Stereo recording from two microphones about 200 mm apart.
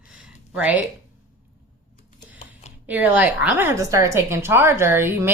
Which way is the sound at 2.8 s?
10° right (ahead or behind).